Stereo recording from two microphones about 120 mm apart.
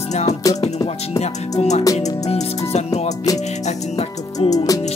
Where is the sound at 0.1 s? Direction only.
65° left (ahead or behind).